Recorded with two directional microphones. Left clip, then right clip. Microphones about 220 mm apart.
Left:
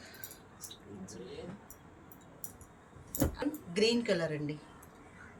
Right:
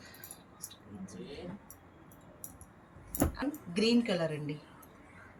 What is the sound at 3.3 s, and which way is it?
A woman's voice, 30° left (ahead or behind).